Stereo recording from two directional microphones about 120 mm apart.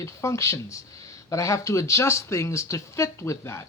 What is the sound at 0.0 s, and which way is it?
Speech, 25° left (ahead or behind).